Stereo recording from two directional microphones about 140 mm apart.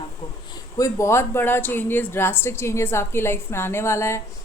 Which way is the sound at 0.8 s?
20° left (ahead or behind).